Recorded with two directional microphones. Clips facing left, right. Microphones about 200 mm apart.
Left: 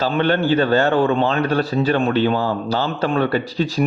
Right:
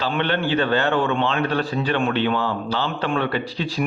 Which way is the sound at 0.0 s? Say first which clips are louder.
Left 5 dB; 40° left (ahead or behind).